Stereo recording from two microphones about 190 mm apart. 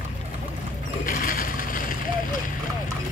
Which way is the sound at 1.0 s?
45° left (ahead or behind).